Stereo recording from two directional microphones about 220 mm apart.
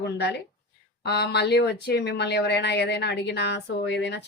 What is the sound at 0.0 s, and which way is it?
Speech, 50° left (ahead or behind).